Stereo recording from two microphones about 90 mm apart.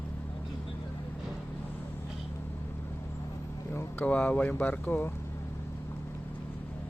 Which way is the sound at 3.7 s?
20° left (ahead or behind).